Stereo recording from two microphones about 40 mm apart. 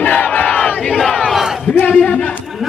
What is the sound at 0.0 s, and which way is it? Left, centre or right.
Crowd, left.